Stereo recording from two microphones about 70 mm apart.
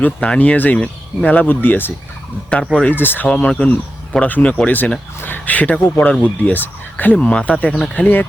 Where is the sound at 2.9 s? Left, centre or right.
Left.